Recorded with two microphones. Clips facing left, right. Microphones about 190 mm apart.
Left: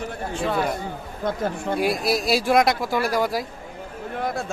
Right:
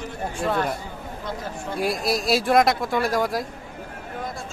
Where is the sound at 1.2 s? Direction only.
55° left (ahead or behind).